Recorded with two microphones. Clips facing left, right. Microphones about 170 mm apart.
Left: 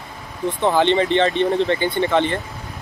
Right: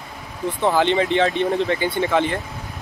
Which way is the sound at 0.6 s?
5° right (ahead or behind).